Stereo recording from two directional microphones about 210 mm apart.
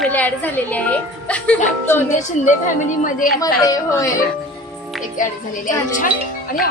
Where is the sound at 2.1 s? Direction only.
35° left (ahead or behind).